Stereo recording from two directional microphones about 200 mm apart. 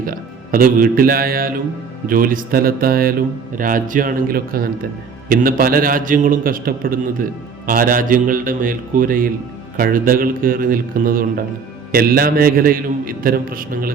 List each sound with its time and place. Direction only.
0.0 s a man's voice: 45° right (ahead or behind)